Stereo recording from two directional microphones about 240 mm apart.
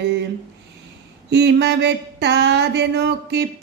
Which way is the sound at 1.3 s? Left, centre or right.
Right.